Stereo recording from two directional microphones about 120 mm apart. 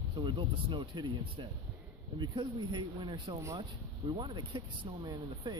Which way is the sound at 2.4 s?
40° right (ahead or behind).